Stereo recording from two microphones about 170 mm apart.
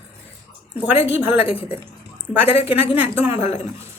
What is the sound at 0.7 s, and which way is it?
Speech, 10° right (ahead or behind).